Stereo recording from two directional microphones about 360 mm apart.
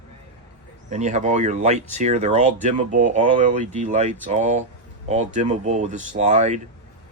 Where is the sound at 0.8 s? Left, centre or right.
Centre.